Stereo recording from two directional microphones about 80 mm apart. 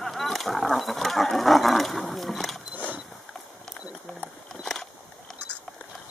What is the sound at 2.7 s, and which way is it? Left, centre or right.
Mechanisms, right.